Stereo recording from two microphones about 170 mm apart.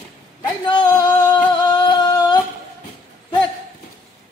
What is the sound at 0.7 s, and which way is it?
Singing, 25° left (ahead or behind).